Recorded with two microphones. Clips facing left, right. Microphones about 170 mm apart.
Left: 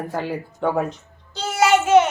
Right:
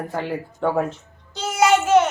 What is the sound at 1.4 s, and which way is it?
Music, centre (ahead or behind).